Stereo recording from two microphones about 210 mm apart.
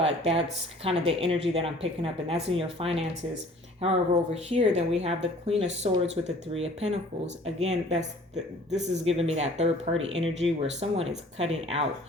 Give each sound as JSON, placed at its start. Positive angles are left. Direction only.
{"t": 0.9, "sound": "speech", "side_deg": -25}